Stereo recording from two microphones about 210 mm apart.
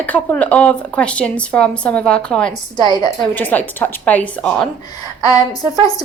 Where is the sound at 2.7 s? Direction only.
20° left (ahead or behind).